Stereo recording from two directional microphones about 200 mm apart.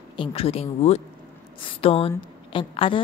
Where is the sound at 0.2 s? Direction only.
30° left (ahead or behind).